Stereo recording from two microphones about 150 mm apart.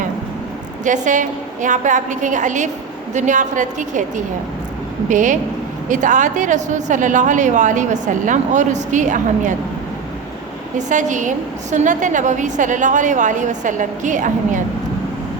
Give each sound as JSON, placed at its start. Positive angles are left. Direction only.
{"t": 0.9, "sound": "a woman's voice", "side_deg": -55}
{"t": 5.0, "sound": "a woman's voice", "side_deg": -55}
{"t": 10.8, "sound": "a woman's voice", "side_deg": -55}